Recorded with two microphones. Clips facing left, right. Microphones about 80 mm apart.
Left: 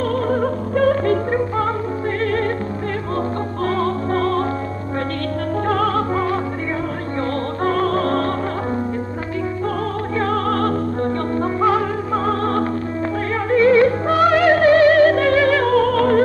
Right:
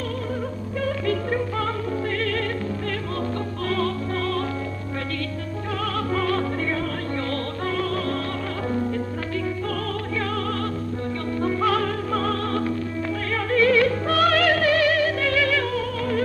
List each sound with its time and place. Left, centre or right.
0.3 s music: left
3.6 s music: left
5.7 s music: left
6.1 s opera: left
7.6 s music: left
11.4 s music: left
13.5 s music: left